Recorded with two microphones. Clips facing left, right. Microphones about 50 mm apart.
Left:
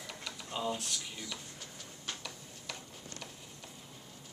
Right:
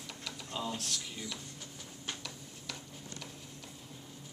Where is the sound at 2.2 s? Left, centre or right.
Centre.